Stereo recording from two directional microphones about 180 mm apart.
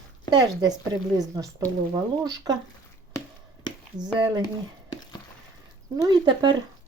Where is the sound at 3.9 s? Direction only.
25° right (ahead or behind).